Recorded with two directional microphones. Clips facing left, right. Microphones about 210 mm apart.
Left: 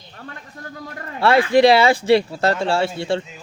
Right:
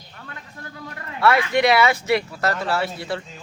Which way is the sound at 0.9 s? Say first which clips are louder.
Left 3 dB; 30° left (ahead or behind).